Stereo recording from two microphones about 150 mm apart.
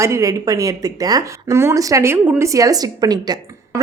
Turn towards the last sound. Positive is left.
turn(degrees=-25)  # may be behind; listen again after turning